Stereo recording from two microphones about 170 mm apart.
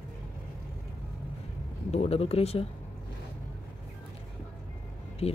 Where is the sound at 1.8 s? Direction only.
35° left (ahead or behind).